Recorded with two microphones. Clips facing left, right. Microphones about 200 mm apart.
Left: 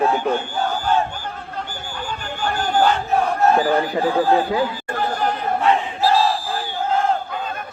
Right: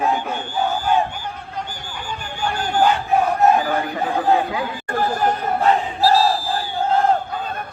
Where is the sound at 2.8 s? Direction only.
15° right (ahead or behind).